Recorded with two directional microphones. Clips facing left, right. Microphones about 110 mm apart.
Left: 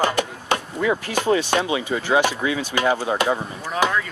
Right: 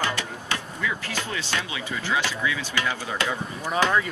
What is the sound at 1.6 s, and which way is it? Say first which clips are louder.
Speech: left 8 dB; 30° left (ahead or behind).